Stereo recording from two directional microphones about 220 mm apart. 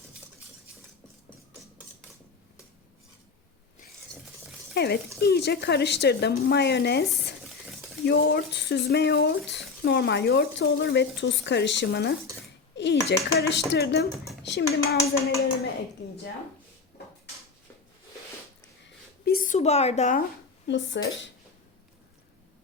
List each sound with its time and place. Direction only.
4.7 s speech: 45° left (ahead or behind)
8.0 s a child's voice: 50° left (ahead or behind)
19.2 s speech: 40° left (ahead or behind)
20.7 s speech: 55° left (ahead or behind)